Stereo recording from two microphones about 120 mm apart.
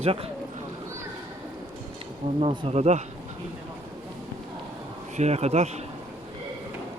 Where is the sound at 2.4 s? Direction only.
50° right (ahead or behind); by 3.0 s 65° right (ahead or behind).